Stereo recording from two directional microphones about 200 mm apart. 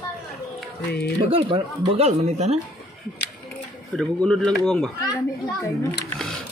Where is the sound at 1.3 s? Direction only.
25° right (ahead or behind).